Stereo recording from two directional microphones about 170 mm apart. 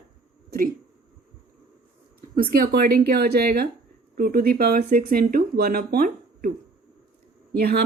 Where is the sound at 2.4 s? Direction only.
65° right (ahead or behind).